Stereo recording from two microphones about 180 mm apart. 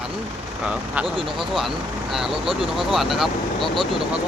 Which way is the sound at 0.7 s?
5° right (ahead or behind).